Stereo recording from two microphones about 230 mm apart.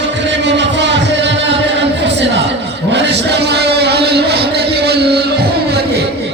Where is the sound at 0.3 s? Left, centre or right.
Right.